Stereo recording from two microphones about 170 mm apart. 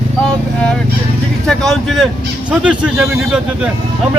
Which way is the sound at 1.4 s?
5° left (ahead or behind).